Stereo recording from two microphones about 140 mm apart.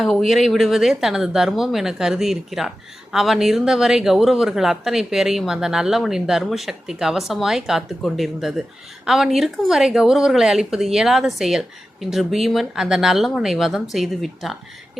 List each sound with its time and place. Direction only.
0.0 s speech: centre (ahead or behind)